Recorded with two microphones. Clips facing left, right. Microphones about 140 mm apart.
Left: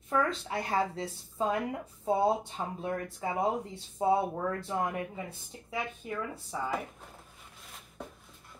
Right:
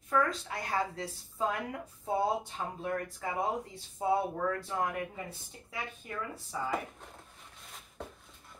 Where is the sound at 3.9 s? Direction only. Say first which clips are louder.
Left 3 dB; 20° left (ahead or behind).